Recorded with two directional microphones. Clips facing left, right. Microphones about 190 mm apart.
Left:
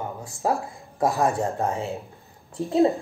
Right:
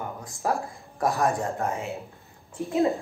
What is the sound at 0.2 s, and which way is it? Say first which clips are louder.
A woman's voice: left 3 dB; 25° left (ahead or behind).